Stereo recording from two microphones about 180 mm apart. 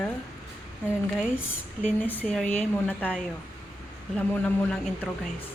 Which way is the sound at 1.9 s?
10° left (ahead or behind).